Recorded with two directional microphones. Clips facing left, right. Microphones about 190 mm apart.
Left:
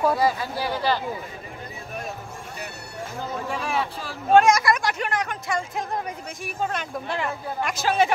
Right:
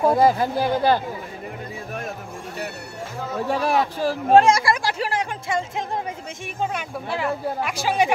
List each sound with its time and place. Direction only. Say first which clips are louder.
0.2 s speech: right 5 dB; 50° right (ahead or behind)
3.4 s speech: right 8 dB; 40° right (ahead or behind)
6.7 s speech: right 1 dB; 10° right (ahead or behind)